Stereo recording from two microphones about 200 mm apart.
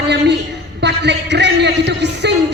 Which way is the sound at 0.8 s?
60° right (ahead or behind).